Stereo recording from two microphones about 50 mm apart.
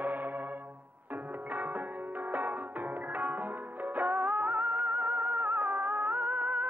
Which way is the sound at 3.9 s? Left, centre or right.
Right.